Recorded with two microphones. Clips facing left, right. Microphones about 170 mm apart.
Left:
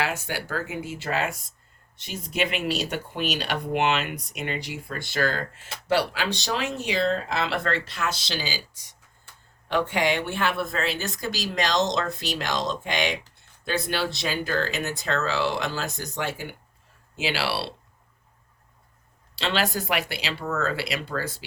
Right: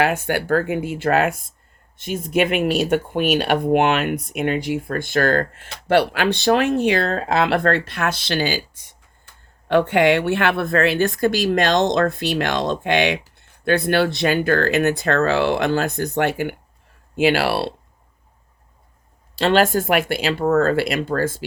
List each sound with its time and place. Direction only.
0.0 s speech: 55° right (ahead or behind)
19.4 s speech: 50° right (ahead or behind)